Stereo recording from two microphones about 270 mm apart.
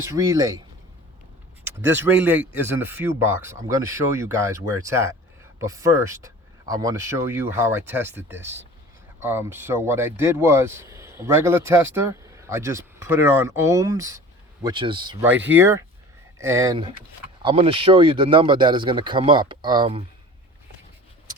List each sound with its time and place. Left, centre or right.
0.0 s speech: centre
1.6 s speech: centre